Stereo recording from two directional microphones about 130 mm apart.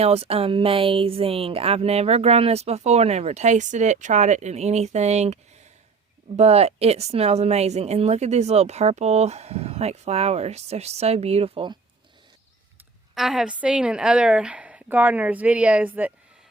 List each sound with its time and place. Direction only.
0.0 s speech: 50° right (ahead or behind)
13.1 s a woman's voice: 5° right (ahead or behind)